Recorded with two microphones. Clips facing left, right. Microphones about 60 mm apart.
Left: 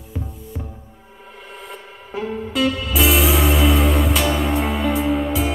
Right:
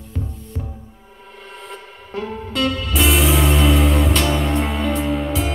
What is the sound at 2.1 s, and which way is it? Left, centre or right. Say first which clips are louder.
Music: left 1 dB; centre.